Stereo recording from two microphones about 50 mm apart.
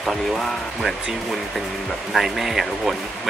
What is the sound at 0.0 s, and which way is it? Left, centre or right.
Speech, centre.